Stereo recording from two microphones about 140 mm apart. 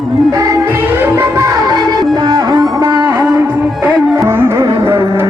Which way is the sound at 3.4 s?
10° right (ahead or behind).